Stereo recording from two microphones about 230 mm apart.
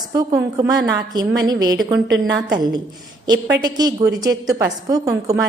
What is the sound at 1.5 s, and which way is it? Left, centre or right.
A woman's voice, centre.